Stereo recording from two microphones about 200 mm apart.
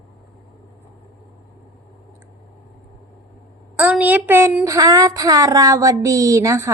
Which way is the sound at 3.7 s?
5° right (ahead or behind).